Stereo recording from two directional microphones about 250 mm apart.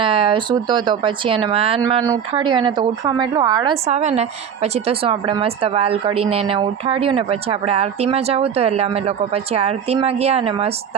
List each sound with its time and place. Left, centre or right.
0.0 s speech: right